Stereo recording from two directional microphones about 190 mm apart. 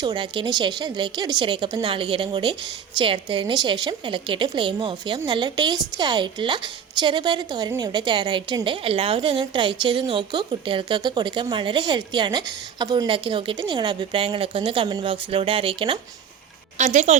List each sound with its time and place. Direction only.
0.0 s speech: 25° right (ahead or behind)
16.7 s speech: 40° right (ahead or behind)